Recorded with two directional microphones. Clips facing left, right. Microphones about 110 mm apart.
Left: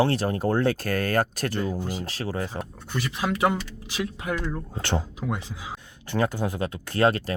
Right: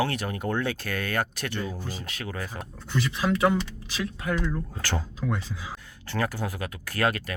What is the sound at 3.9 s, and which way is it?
Speech, 20° left (ahead or behind).